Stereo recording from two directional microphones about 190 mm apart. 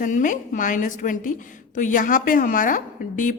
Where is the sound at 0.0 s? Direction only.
45° left (ahead or behind).